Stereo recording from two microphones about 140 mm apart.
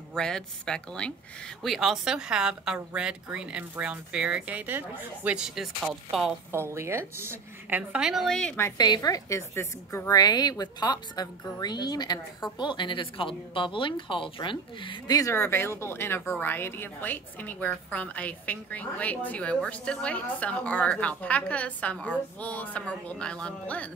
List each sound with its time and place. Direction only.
0.1 s a woman's voice: 5° left (ahead or behind)
6.5 s a woman's voice: 20° right (ahead or behind); by 8.5 s 5° left (ahead or behind)
8.7 s a woman's voice: 30° left (ahead or behind); by 23.9 s 10° left (ahead or behind)